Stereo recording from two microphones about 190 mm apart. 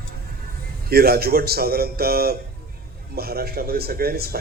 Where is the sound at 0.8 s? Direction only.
55° right (ahead or behind).